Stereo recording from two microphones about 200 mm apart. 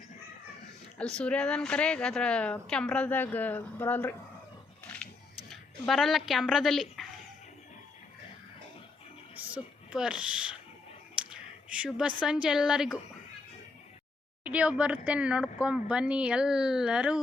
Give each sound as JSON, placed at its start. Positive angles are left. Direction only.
{"t": 0.9, "sound": "a woman's voice", "side_deg": 5}
{"t": 5.5, "sound": "speech", "side_deg": 0}
{"t": 9.3, "sound": "a sound", "side_deg": -5}
{"t": 11.3, "sound": "speech", "side_deg": -5}
{"t": 14.4, "sound": "a woman's voice", "side_deg": -5}